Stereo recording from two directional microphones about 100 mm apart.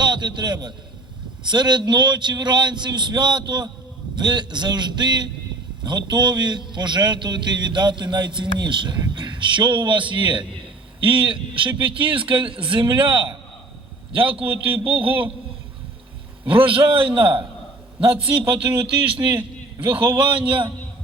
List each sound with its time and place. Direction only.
0.0 s a man's voice: 45° right (ahead or behind)
14.8 s speech: 65° right (ahead or behind)
16.5 s speech: 60° right (ahead or behind)
18.7 s a man's voice: 20° right (ahead or behind)